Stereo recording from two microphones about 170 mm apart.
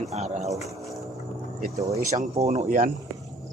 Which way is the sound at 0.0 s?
40° right (ahead or behind).